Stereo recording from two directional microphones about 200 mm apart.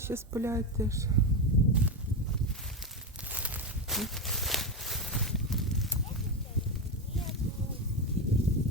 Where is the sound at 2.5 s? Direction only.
Centre (ahead or behind).